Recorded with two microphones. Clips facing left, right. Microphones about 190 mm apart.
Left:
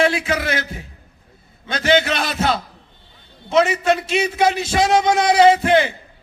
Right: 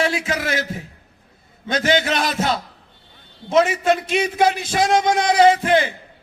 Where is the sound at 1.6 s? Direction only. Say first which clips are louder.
Left 1 dB; 45° right (ahead or behind).